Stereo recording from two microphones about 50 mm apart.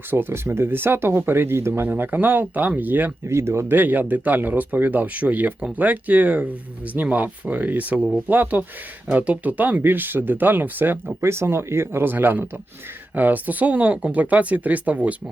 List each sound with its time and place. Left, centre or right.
0.1 s speech: right
1.9 s speech: right
3.2 s speech: right
3.7 s speech: right
11.2 s speech: right